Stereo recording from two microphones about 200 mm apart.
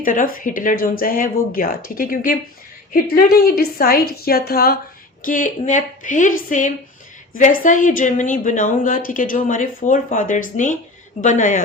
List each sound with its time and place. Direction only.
0.0 s a woman's voice: 45° left (ahead or behind)